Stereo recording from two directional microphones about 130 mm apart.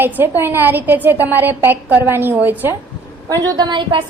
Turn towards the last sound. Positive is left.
turn(degrees=-35)  # may be behind; listen again after turning